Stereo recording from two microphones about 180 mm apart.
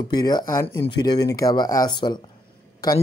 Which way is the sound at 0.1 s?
20° left (ahead or behind).